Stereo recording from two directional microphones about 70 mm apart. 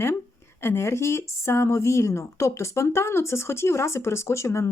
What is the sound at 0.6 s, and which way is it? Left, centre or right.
Speech, left.